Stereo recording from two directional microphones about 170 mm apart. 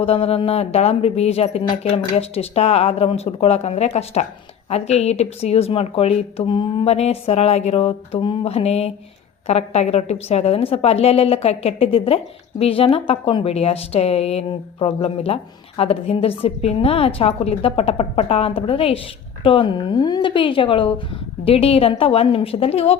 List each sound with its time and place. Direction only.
0.0 s a woman's voice: 35° left (ahead or behind)